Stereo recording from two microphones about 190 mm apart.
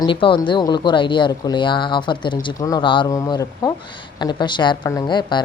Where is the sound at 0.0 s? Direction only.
25° left (ahead or behind).